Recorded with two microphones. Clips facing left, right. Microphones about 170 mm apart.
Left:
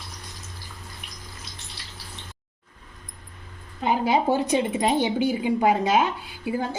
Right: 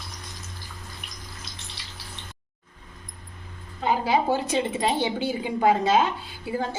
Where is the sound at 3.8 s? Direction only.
20° left (ahead or behind).